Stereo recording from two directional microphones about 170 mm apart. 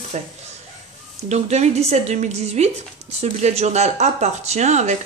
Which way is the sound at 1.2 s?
40° right (ahead or behind).